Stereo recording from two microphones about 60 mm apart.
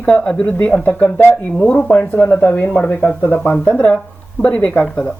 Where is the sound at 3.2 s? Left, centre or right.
Left.